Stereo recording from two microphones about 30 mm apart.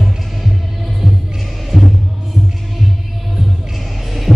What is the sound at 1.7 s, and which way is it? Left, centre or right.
Music, centre.